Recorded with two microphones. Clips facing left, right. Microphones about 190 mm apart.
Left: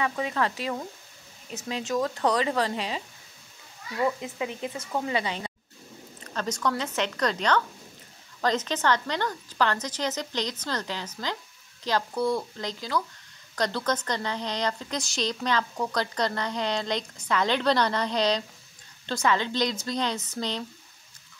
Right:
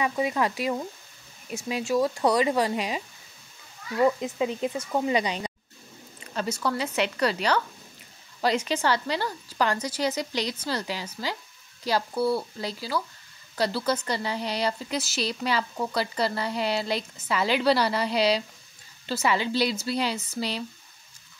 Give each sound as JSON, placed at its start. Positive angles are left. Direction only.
{"t": 0.0, "sound": "speech", "side_deg": -10}
{"t": 4.0, "sound": "speech", "side_deg": -25}